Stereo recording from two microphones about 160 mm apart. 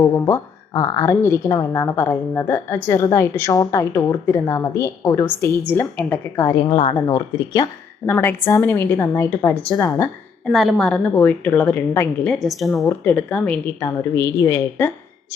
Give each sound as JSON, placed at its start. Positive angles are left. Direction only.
{"t": 0.0, "sound": "a woman's voice", "side_deg": 15}
{"t": 6.7, "sound": "speech", "side_deg": 40}
{"t": 7.1, "sound": "speech", "side_deg": 25}
{"t": 8.0, "sound": "a woman's voice", "side_deg": 15}
{"t": 10.5, "sound": "a woman's voice", "side_deg": 0}